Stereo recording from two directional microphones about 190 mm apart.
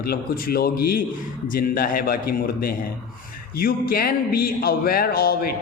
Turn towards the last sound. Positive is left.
turn(degrees=55)  # may be behind; listen again after turning